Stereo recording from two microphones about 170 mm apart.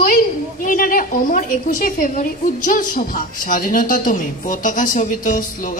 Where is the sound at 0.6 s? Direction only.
55° left (ahead or behind).